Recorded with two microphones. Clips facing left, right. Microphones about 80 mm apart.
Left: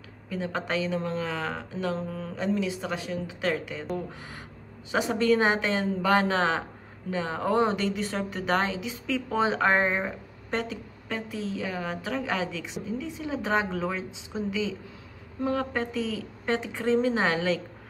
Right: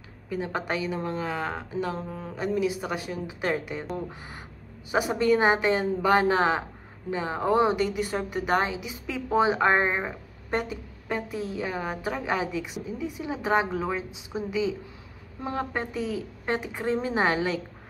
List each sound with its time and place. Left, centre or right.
0.3 s a woman's voice: centre